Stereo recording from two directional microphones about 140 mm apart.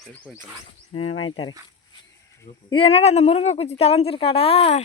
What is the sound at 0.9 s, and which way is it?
Speech, 45° left (ahead or behind).